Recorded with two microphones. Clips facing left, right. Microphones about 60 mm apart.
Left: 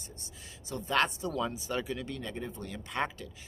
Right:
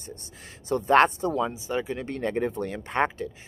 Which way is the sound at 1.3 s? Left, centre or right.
Right.